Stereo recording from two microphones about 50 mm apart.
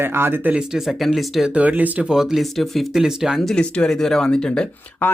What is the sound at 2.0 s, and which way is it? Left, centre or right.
Speech, centre.